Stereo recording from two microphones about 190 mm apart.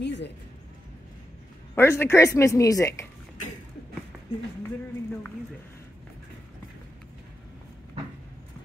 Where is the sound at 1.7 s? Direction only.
10° left (ahead or behind).